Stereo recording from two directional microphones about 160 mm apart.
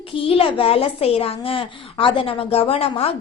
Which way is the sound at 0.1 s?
35° left (ahead or behind).